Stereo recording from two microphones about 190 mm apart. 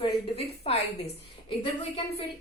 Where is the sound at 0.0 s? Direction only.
30° left (ahead or behind).